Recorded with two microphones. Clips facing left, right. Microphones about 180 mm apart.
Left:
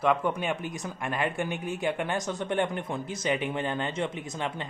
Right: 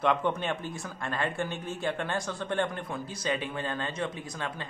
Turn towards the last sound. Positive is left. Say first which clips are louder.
# left 3 dB
turn(degrees=20)  # may be behind; listen again after turning